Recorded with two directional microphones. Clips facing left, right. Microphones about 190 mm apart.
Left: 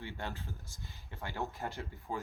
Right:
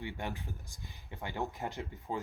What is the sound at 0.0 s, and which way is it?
Speech, 15° right (ahead or behind).